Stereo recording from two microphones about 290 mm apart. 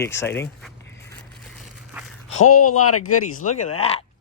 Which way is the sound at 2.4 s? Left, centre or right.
Left.